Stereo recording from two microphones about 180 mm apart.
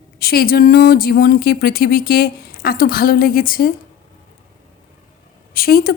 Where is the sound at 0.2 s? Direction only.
55° left (ahead or behind).